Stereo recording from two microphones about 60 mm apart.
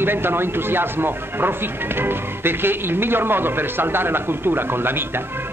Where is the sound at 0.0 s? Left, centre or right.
Right.